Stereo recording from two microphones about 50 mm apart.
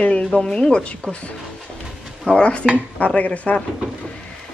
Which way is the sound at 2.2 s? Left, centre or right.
Left.